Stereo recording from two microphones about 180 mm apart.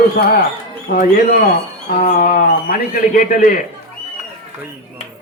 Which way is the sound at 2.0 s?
45° left (ahead or behind).